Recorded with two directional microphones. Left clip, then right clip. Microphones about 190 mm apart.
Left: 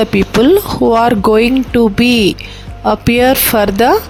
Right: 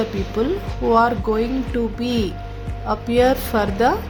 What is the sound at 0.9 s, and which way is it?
A woman's voice, 50° left (ahead or behind).